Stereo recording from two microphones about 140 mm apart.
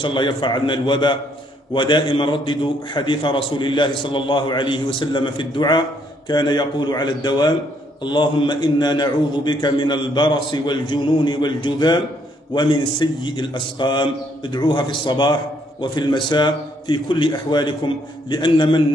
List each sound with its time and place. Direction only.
0.0 s a man's voice: 35° left (ahead or behind)